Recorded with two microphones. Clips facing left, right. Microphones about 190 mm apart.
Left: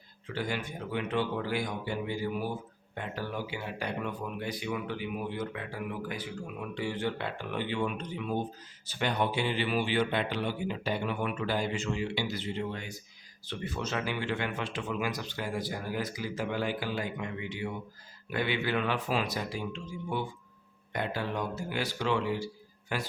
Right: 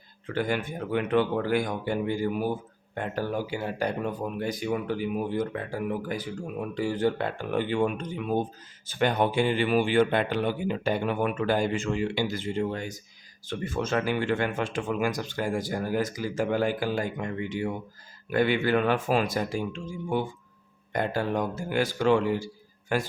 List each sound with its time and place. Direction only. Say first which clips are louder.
0.3 s speech: right 6 dB; 55° right (ahead or behind)